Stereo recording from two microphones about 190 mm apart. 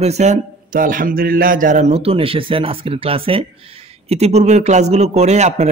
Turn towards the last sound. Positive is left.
turn(degrees=-35)  # may be behind; listen again after turning